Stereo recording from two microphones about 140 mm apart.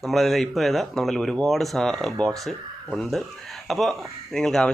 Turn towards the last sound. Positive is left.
turn(degrees=5)  # may be behind; listen again after turning